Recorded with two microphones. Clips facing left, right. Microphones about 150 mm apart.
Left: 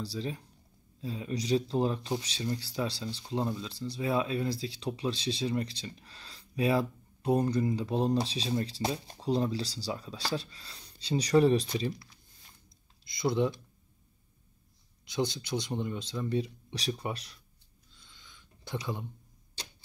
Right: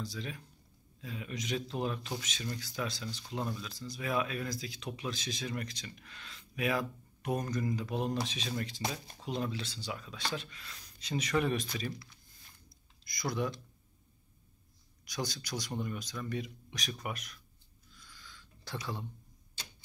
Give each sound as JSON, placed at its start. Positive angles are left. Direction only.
{"t": 0.0, "sound": "speech", "side_deg": 30}
{"t": 15.0, "sound": "speech", "side_deg": 25}
{"t": 17.9, "sound": "a sound", "side_deg": 25}